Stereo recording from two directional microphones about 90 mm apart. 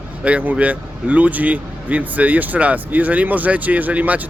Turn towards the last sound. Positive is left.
turn(degrees=-20)  # may be behind; listen again after turning